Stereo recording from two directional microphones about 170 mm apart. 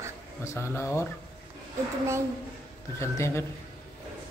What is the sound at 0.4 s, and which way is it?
Speech, 15° left (ahead or behind).